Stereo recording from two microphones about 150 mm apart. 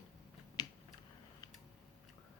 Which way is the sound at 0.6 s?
25° left (ahead or behind).